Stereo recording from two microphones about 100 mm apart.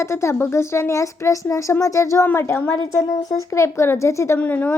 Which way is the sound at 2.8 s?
40° left (ahead or behind).